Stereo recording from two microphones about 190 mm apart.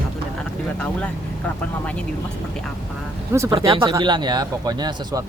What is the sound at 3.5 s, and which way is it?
Speech, 25° right (ahead or behind).